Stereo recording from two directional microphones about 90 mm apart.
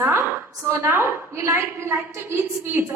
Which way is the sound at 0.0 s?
25° right (ahead or behind).